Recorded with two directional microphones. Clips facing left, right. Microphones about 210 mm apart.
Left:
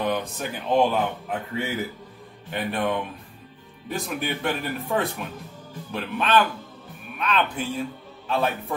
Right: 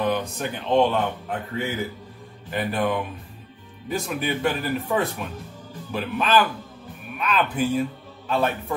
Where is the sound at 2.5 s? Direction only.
Centre (ahead or behind).